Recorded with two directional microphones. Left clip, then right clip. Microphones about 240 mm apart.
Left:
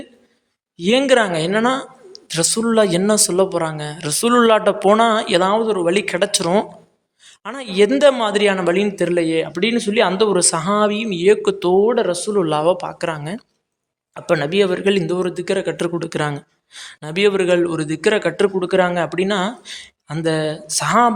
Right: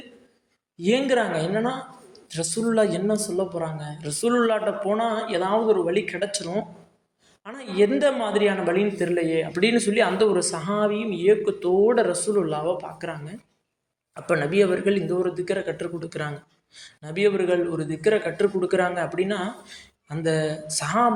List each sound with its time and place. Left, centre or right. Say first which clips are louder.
0.8 s speech: left 7 dB; left
9.5 s speech: left 2 dB; centre